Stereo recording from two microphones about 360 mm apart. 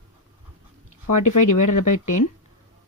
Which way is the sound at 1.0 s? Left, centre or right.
Left.